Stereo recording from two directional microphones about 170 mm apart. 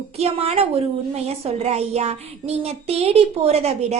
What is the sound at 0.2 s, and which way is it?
A woman's voice, 35° right (ahead or behind).